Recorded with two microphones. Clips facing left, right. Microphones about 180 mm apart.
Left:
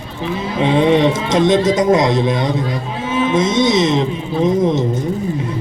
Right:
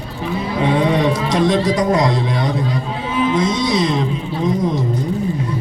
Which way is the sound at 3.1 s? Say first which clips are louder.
Left 2 dB; 20° left (ahead or behind).